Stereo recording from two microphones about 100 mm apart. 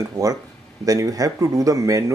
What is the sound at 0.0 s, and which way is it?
Speech, 35° right (ahead or behind).